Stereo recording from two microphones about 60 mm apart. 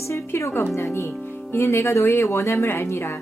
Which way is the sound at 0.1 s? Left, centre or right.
Left.